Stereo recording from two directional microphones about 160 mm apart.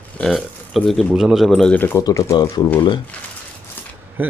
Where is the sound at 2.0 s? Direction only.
20° left (ahead or behind).